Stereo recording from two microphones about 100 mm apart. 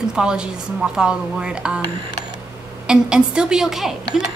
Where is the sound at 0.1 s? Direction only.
10° right (ahead or behind).